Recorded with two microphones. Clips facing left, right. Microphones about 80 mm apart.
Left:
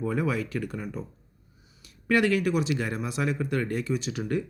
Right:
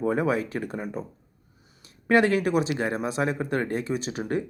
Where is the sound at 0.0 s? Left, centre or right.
Right.